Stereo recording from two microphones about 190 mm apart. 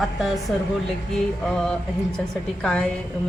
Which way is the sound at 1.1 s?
Centre (ahead or behind).